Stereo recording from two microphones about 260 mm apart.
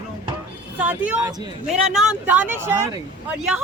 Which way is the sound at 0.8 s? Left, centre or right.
Centre.